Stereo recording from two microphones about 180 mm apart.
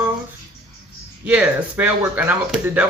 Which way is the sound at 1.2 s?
5° right (ahead or behind).